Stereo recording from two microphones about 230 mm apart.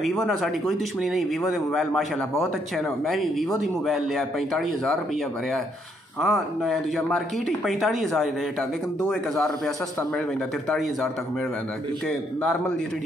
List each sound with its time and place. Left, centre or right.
0.0 s speech: centre
6.2 s speech: centre